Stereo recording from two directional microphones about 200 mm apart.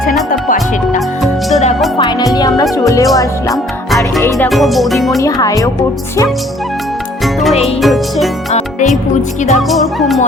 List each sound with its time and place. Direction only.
0.3 s speech: 45° left (ahead or behind)
0.9 s music: centre (ahead or behind)
2.0 s music: 20° left (ahead or behind)
2.7 s speech: 15° left (ahead or behind)
4.4 s speech: centre (ahead or behind)
5.2 s speech: 15° left (ahead or behind)
7.6 s speech: centre (ahead or behind)
9.6 s speech: centre (ahead or behind)